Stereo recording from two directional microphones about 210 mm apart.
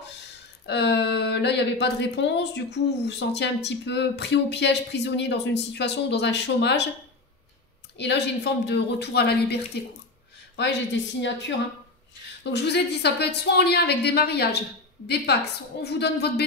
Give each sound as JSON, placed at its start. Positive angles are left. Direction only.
{"t": 0.7, "sound": "speech", "side_deg": 55}
{"t": 8.0, "sound": "a woman's voice", "side_deg": 55}